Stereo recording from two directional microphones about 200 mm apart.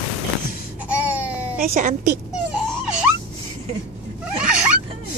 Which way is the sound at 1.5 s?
45° right (ahead or behind).